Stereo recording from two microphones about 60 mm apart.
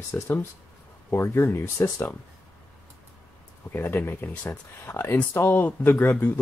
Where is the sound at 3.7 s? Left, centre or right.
Left.